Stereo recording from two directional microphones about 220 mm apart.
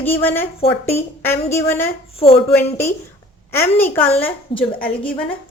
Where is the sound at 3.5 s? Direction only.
10° left (ahead or behind).